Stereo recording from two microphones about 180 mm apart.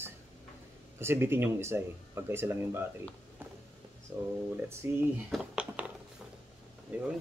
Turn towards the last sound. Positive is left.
turn(degrees=-10)  # may be behind; listen again after turning